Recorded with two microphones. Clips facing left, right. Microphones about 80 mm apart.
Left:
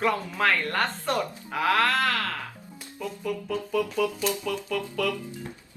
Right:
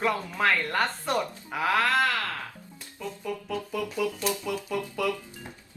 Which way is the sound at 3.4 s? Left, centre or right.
Centre.